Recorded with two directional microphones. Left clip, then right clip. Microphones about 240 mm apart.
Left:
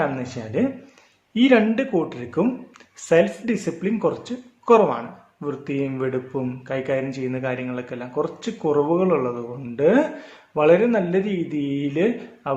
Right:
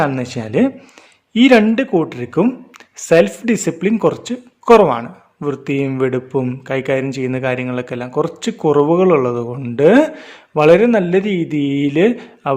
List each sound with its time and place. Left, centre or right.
0.0 s speech: right